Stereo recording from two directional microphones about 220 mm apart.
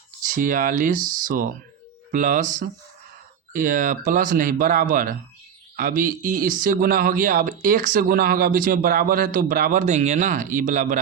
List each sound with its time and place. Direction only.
0.2 s speech: 40° right (ahead or behind)